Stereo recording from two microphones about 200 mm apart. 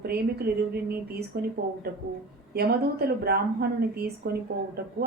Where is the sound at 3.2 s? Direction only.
50° right (ahead or behind).